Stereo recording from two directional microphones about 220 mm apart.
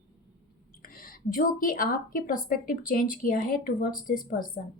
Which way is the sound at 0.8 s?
40° left (ahead or behind).